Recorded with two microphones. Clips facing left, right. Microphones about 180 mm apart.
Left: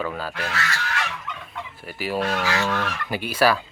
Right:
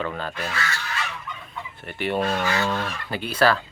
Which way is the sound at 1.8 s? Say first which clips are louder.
Right 1 dB; 5° left (ahead or behind).